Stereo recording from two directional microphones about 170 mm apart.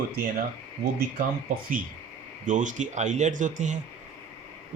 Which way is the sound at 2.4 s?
45° right (ahead or behind).